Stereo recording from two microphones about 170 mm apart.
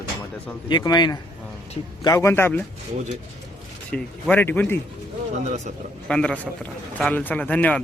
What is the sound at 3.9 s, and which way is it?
Speech, 10° left (ahead or behind).